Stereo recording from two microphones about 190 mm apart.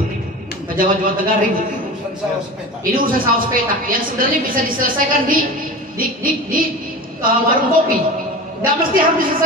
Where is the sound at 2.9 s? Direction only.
50° right (ahead or behind).